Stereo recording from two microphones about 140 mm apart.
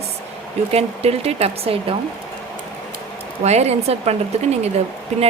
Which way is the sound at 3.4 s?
50° right (ahead or behind).